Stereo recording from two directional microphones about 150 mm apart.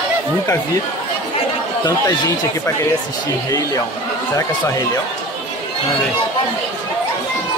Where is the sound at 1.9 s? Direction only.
25° left (ahead or behind).